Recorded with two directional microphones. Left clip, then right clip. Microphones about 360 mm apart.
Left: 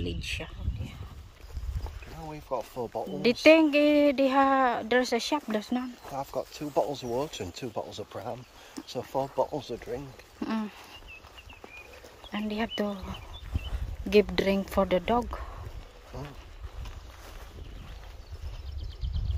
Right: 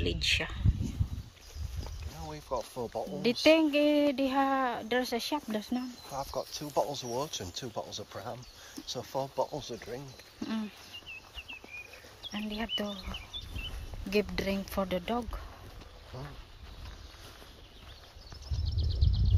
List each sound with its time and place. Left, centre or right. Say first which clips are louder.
0.0 s speech: right 6 dB; centre
2.2 s speech: left 2 dB; left
3.2 s speech: left 5 dB; centre
6.1 s speech: left 2 dB; left
10.4 s speech: left 5 dB; centre
12.3 s speech: left 3 dB; centre
14.1 s speech: left 8 dB; centre